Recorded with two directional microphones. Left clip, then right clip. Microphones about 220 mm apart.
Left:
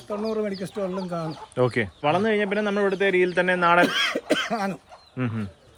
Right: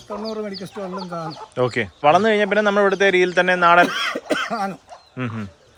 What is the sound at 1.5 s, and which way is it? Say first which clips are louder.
Speech: right 2 dB; 5° right (ahead or behind).